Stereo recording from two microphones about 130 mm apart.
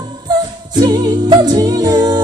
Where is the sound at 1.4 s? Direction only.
30° right (ahead or behind).